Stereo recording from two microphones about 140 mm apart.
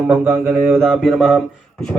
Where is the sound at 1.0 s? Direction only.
Centre (ahead or behind).